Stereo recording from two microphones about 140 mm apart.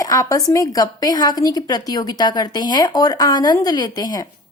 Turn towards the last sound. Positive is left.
turn(degrees=25)  # may be behind; listen again after turning